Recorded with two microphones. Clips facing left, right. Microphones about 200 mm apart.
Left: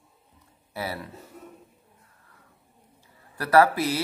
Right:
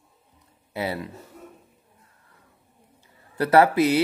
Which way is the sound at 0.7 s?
20° right (ahead or behind).